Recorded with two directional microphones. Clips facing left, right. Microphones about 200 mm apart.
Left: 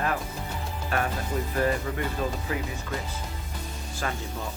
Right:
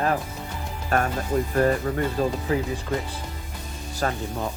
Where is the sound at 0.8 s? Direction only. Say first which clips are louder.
Right 5 dB; 45° right (ahead or behind).